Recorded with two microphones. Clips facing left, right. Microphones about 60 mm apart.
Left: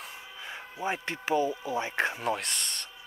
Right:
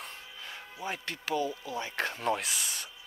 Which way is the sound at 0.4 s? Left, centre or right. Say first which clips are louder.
Left 5 dB; left.